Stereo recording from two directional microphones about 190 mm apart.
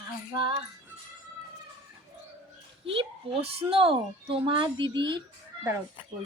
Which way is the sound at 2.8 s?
30° right (ahead or behind).